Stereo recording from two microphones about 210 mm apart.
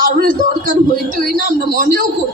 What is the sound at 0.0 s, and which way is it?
A man's voice, 45° right (ahead or behind).